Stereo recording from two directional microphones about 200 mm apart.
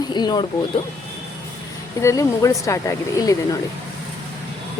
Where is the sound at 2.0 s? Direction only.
15° left (ahead or behind).